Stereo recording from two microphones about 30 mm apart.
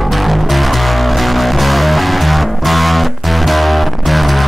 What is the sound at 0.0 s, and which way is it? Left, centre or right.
Music, centre.